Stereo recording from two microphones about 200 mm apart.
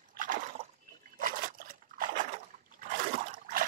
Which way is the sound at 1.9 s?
40° right (ahead or behind).